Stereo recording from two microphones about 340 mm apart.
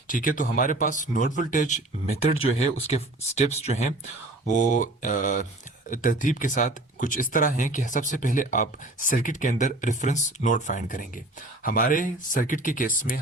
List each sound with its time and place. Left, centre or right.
0.1 s speech: left